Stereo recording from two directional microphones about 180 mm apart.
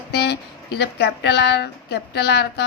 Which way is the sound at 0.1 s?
65° left (ahead or behind).